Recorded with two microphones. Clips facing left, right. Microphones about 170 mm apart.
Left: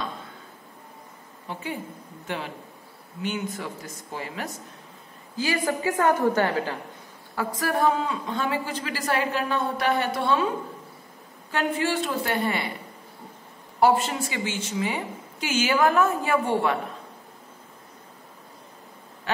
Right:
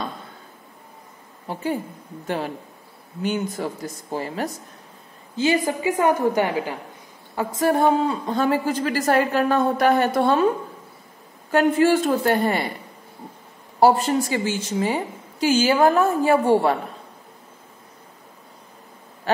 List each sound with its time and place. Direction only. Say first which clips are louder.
1.5 s a woman's voice: right 7 dB; 40° right (ahead or behind)
5.3 s a woman's voice: right 5 dB; 25° right (ahead or behind)
7.3 s a woman's voice: right 6 dB; 25° right (ahead or behind); by 10.5 s 45° right (ahead or behind)
11.5 s a woman's voice: right 8 dB; 45° right (ahead or behind)
13.7 s a woman's voice: right 4 dB; 35° right (ahead or behind)
19.3 s owl: right 6 dB; 40° right (ahead or behind)